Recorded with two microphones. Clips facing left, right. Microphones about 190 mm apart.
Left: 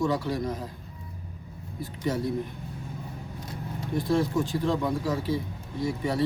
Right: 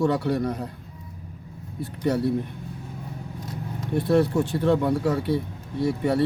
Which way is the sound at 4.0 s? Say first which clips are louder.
Right 5 dB; 65° right (ahead or behind).